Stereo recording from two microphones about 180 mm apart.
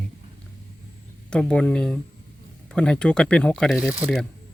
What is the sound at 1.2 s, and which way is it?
Speech, 5° left (ahead or behind).